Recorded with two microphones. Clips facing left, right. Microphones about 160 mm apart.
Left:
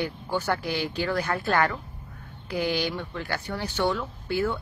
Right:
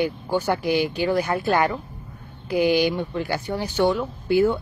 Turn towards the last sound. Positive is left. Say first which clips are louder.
# right 8 dB
turn(degrees=-15)  # may be behind; listen again after turning